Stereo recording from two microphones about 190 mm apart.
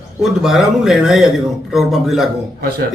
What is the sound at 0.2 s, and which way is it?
Speech, centre (ahead or behind).